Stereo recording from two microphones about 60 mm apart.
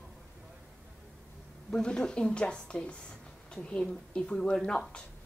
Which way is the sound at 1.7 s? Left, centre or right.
Centre.